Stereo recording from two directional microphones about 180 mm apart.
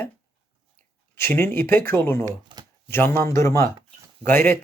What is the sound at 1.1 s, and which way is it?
Speech, 15° left (ahead or behind).